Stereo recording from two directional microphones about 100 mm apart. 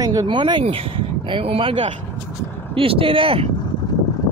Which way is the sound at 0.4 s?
55° right (ahead or behind).